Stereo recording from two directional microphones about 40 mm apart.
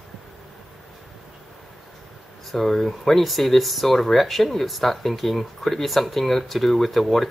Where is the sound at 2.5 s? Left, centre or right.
Centre.